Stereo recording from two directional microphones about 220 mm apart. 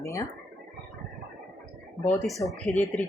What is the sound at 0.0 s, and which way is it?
Speech, 15° left (ahead or behind).